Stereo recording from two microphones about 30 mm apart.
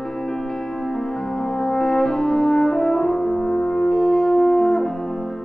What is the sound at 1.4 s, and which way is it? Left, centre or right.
French horn, centre.